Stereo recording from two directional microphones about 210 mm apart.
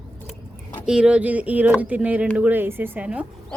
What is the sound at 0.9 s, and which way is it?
A woman's voice, 5° right (ahead or behind).